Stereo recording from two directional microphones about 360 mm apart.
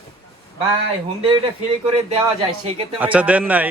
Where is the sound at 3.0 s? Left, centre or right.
Centre.